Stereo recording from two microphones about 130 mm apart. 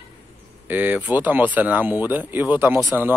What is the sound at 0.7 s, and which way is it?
Speech, 15° right (ahead or behind).